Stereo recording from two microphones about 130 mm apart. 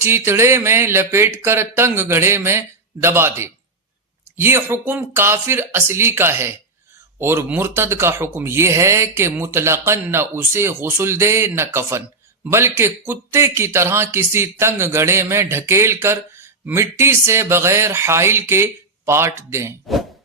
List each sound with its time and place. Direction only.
0.0 s a man's voice: 20° right (ahead or behind)